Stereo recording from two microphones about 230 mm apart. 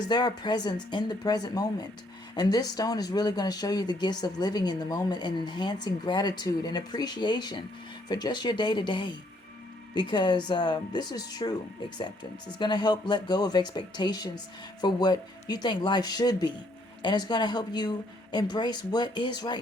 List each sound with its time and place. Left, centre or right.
0.1 s speech: centre
12.5 s speech: centre